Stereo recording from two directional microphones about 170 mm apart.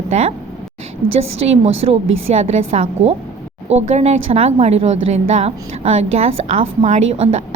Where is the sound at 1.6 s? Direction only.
40° right (ahead or behind).